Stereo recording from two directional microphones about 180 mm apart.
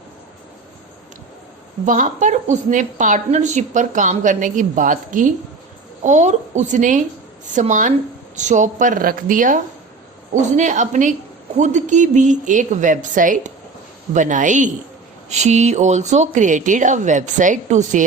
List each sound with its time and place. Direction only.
1.8 s a woman's voice: 45° right (ahead or behind)
10.6 s a woman's voice: 45° right (ahead or behind)